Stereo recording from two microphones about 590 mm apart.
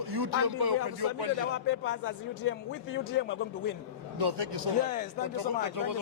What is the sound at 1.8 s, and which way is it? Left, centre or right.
A man's voice, centre.